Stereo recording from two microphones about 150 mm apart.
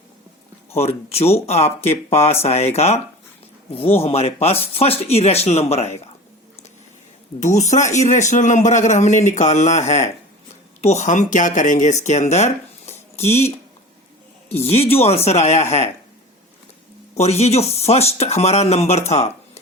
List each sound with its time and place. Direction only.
0.7 s a man's voice: 45° left (ahead or behind)
7.4 s a man's voice: 50° left (ahead or behind)
14.6 s a man's voice: 45° left (ahead or behind)
17.2 s a man's voice: 45° left (ahead or behind)